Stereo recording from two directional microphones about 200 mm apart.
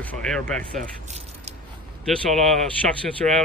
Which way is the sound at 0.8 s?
35° right (ahead or behind).